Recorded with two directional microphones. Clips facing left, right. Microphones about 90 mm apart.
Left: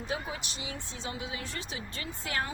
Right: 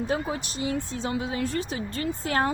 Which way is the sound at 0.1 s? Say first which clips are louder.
Right 8 dB; 45° right (ahead or behind).